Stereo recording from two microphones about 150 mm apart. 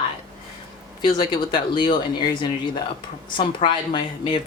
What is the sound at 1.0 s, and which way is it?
Speech, 30° left (ahead or behind).